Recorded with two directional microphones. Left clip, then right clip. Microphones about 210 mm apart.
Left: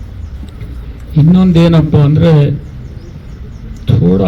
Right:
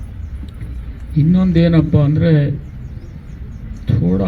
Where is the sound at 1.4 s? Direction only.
45° left (ahead or behind).